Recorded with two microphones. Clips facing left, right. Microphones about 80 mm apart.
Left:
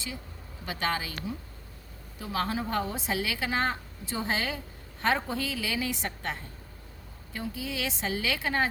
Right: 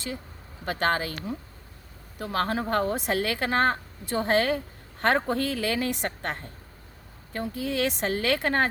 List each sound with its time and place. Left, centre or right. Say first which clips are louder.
0.6 s speech: right 5 dB; right